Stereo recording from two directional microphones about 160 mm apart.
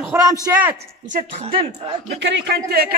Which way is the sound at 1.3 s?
35° right (ahead or behind).